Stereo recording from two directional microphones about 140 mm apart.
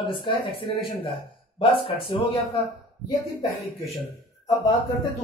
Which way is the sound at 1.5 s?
40° left (ahead or behind).